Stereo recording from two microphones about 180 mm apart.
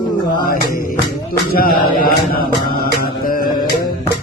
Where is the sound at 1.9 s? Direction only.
55° left (ahead or behind).